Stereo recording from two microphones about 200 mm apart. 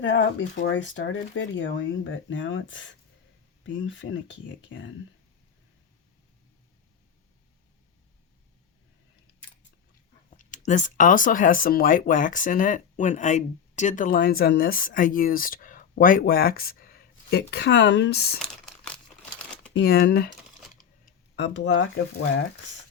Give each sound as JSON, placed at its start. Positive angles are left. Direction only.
{"t": 0.0, "sound": "speech", "side_deg": 70}
{"t": 10.7, "sound": "speech", "side_deg": 40}
{"t": 19.7, "sound": "speech", "side_deg": 55}
{"t": 21.3, "sound": "speech", "side_deg": 60}